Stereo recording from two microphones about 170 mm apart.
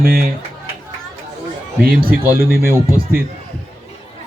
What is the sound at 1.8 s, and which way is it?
Speech, 60° right (ahead or behind).